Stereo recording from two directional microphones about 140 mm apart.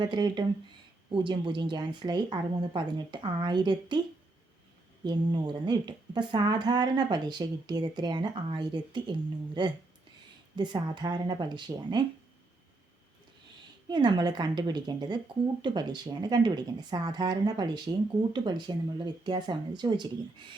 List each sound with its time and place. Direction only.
0.0 s a woman's voice: 30° right (ahead or behind)
5.0 s a woman's voice: 30° right (ahead or behind)
13.8 s a woman's voice: 30° right (ahead or behind)